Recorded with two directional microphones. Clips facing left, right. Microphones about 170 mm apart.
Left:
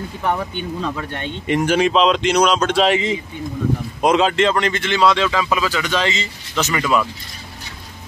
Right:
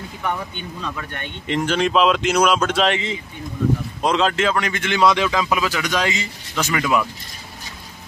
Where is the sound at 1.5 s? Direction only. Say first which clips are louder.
Left 4 dB; 10° left (ahead or behind).